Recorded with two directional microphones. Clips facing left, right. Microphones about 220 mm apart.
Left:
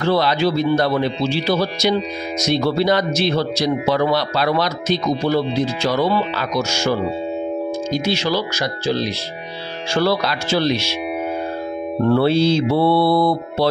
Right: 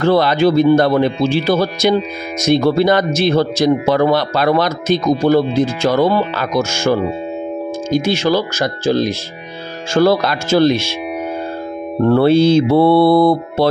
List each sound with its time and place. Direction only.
0.0 s speech: 50° right (ahead or behind)
12.1 s speech: 50° right (ahead or behind)